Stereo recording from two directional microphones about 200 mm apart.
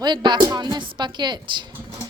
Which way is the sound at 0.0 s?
20° right (ahead or behind).